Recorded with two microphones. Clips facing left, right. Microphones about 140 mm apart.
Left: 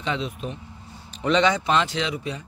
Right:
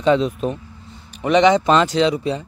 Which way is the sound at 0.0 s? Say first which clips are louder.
Right 11 dB; 40° right (ahead or behind).